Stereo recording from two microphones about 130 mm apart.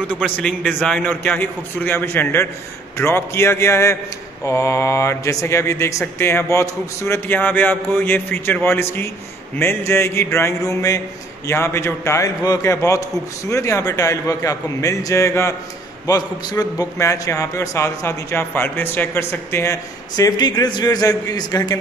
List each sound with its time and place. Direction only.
0.2 s a man's voice: 10° left (ahead or behind); by 21.7 s 30° left (ahead or behind)